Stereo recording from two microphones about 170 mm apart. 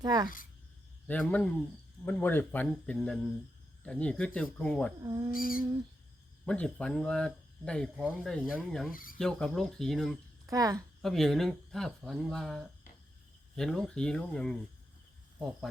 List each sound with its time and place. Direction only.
0.0 s speech: 25° right (ahead or behind)
1.0 s a man's voice: 10° left (ahead or behind)
5.3 s female singing: 55° left (ahead or behind)
6.4 s speech: 5° left (ahead or behind)
8.9 s female singing: 55° left (ahead or behind)
9.1 s speech: 5° left (ahead or behind)
10.4 s speech: 20° right (ahead or behind)
11.0 s speech: centre (ahead or behind)